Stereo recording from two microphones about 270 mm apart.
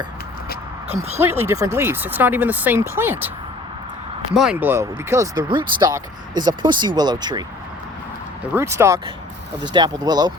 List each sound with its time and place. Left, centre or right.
1.2 s speech: centre
8.5 s speech: centre